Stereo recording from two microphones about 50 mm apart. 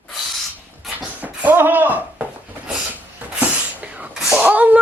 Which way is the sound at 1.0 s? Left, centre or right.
Right.